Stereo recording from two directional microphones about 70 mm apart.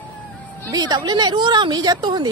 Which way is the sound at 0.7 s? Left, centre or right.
Right.